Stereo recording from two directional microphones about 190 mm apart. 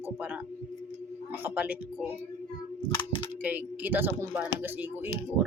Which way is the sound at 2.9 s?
25° left (ahead or behind).